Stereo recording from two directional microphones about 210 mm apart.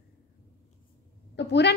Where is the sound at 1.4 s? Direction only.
55° left (ahead or behind).